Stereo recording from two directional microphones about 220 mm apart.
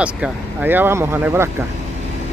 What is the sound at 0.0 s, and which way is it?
Speech, 5° right (ahead or behind).